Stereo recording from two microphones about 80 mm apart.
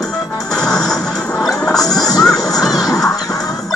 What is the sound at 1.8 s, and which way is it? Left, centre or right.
Music, left.